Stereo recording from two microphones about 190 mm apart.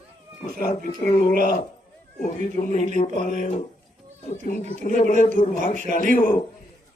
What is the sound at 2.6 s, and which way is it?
Speech, 35° left (ahead or behind).